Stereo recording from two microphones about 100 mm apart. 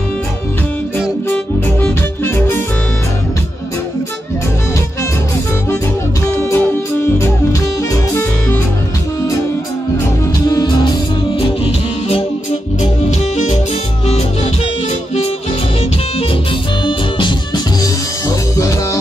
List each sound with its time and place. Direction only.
1.3 s music: 20° left (ahead or behind)
6.3 s music: 20° left (ahead or behind)
8.1 s music: 20° left (ahead or behind)
10.4 s music: 40° left (ahead or behind)
14.0 s music: 90° left
16.8 s music: 55° left (ahead or behind)